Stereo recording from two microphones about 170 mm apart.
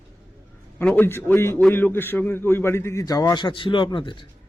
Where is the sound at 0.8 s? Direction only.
10° left (ahead or behind); by 4.2 s 30° left (ahead or behind).